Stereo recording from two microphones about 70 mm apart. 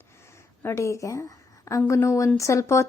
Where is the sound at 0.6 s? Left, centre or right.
Left.